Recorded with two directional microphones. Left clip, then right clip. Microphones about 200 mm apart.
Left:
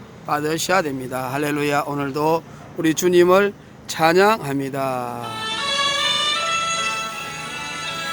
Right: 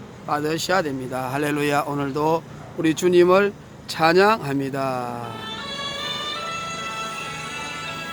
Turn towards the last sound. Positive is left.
turn(degrees=50)  # may be behind; listen again after turning